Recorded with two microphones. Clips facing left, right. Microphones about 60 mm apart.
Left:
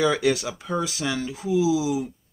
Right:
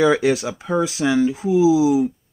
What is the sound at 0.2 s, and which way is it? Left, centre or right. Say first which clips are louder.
Speech: right 4 dB; centre.